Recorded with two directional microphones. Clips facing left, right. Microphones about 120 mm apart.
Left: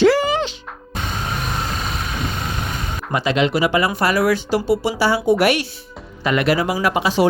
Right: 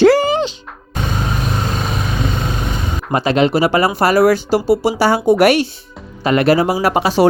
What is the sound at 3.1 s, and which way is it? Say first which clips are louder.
A woman's voice: right 4 dB; 40° right (ahead or behind).